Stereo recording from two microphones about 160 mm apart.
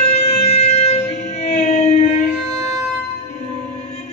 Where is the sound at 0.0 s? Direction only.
40° left (ahead or behind).